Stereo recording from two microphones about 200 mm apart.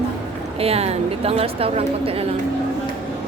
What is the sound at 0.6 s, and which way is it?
A woman's voice, 30° right (ahead or behind).